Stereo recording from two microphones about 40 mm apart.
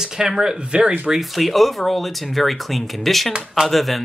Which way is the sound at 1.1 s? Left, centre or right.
Centre.